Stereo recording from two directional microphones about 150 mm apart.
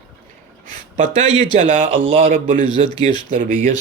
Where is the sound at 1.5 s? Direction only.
45° right (ahead or behind).